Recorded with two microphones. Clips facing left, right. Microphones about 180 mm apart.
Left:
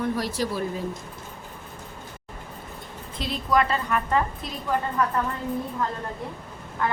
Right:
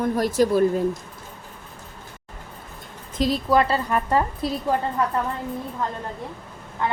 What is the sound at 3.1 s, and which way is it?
A woman's voice, 40° right (ahead or behind).